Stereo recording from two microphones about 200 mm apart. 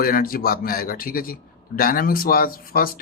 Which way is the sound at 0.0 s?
45° left (ahead or behind).